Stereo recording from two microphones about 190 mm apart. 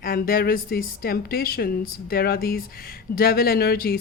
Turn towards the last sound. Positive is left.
turn(degrees=50)  # may be behind; listen again after turning